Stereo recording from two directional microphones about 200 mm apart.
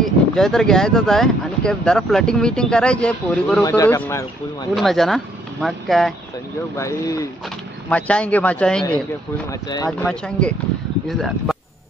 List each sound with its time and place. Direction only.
0.0 s speech: centre (ahead or behind)
4.7 s speech: centre (ahead or behind)
6.8 s speech: 15° left (ahead or behind)
9.5 s speech: 20° left (ahead or behind)
9.8 s speech: 5° left (ahead or behind)